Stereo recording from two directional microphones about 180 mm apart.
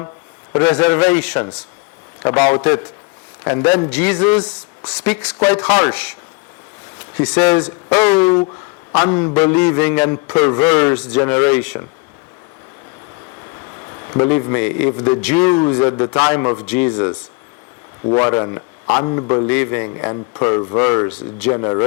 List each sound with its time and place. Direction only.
0.5 s speech: 20° left (ahead or behind)
7.0 s a sound: 10° left (ahead or behind)
7.3 s speech: 10° left (ahead or behind)
9.6 s speech: 10° left (ahead or behind)
10.9 s speech: 5° left (ahead or behind)
11.2 s speech: 20° left (ahead or behind)
13.7 s a sound: 20° left (ahead or behind)
14.4 s speech: 15° left (ahead or behind)
18.2 s speech: 25° left (ahead or behind)
19.5 s speech: 10° left (ahead or behind)
21.1 s speech: 10° left (ahead or behind)
21.5 s speech: 20° left (ahead or behind)